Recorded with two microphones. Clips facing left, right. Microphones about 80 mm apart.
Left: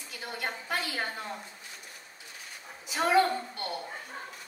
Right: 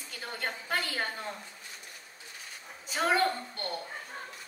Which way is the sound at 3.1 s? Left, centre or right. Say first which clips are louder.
Left 4 dB; centre.